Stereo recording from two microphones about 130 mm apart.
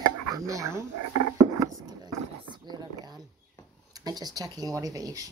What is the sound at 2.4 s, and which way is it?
Speech, 35° right (ahead or behind).